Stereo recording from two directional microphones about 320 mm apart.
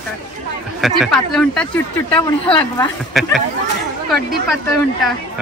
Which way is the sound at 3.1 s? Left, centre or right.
Centre.